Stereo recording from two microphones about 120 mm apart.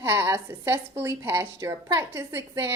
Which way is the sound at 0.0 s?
20° right (ahead or behind).